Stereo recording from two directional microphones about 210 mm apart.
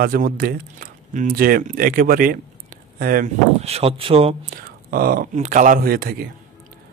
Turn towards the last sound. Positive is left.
turn(degrees=-45)  # may be behind; listen again after turning